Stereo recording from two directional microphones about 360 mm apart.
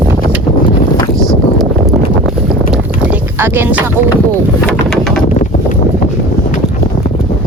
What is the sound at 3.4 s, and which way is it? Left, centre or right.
Speech, centre.